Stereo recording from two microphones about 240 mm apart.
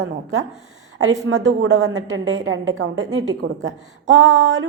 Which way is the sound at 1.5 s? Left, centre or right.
Right.